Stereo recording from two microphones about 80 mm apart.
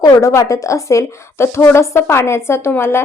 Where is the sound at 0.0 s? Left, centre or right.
Left.